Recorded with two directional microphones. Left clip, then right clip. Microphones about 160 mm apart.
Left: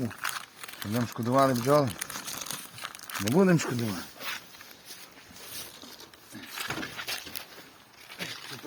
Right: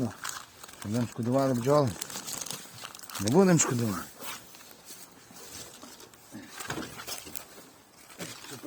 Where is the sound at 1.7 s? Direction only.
35° right (ahead or behind).